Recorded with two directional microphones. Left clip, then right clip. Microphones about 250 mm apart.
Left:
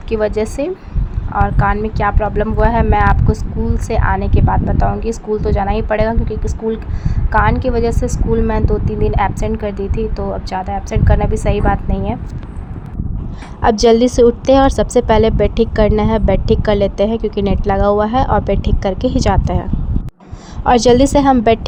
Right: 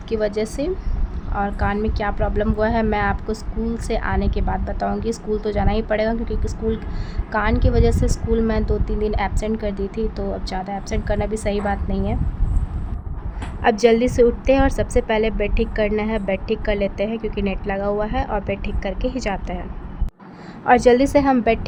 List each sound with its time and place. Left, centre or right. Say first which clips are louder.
0.1 s a woman's voice: left 5 dB; centre
13.6 s a woman's voice: left 5 dB; centre
20.7 s a woman's voice: left 4 dB; centre